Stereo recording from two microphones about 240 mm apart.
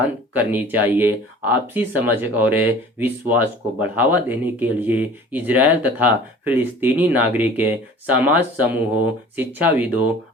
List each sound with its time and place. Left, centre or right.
0.3 s speech: centre